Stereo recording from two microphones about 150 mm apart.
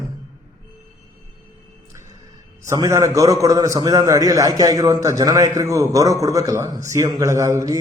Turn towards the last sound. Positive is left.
turn(degrees=-25)  # may be behind; listen again after turning